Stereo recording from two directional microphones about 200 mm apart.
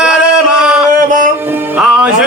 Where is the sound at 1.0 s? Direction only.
40° right (ahead or behind).